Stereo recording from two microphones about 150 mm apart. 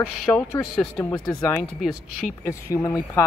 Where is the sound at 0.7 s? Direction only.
5° left (ahead or behind).